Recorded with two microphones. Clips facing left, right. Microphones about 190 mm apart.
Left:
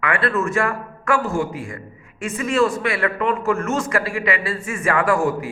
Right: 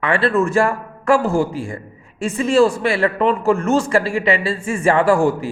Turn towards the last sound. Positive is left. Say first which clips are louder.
# right 4 dB
turn(degrees=-30)  # may be behind; listen again after turning